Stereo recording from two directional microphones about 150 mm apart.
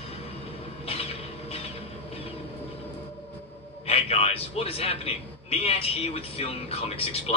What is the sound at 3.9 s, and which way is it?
A man's voice, 40° left (ahead or behind).